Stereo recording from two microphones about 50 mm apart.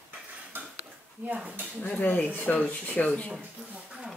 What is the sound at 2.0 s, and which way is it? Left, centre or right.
Speech, left.